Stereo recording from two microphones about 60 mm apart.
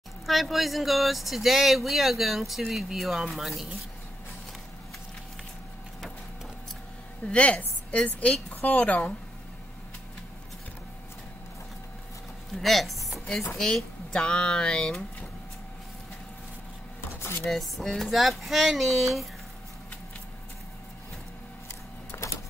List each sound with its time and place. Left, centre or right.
0.3 s speech: centre
7.2 s a woman's voice: left
12.5 s speech: centre
14.1 s speech: centre
17.5 s speech: centre
22.1 s printer: left